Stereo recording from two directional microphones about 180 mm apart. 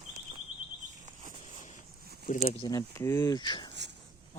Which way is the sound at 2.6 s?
20° left (ahead or behind).